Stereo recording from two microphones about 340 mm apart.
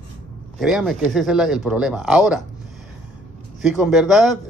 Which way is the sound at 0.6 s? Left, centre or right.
Centre.